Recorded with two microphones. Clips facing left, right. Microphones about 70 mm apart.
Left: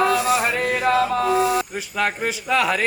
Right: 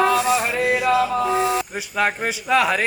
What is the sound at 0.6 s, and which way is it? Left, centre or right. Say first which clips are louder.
Speech: right 2 dB; left.